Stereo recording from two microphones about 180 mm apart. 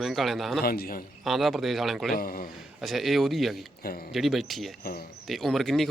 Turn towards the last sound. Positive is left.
turn(degrees=0)  # may be behind; listen again after turning